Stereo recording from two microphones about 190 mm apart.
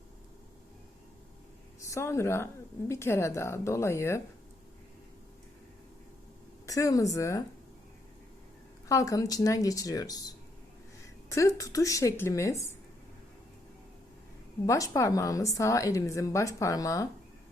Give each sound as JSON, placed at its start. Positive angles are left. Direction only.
{"t": 1.8, "sound": "a woman's voice", "side_deg": 15}
{"t": 6.7, "sound": "a woman's voice", "side_deg": 15}
{"t": 8.9, "sound": "a woman's voice", "side_deg": 15}
{"t": 14.7, "sound": "a woman's voice", "side_deg": 15}